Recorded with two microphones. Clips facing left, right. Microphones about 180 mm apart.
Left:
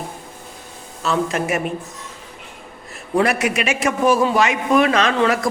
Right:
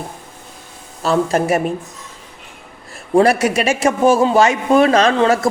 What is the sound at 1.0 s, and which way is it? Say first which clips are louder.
Speech: right 5 dB; 35° right (ahead or behind).